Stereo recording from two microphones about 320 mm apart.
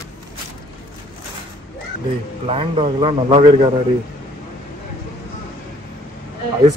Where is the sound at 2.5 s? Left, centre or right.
Centre.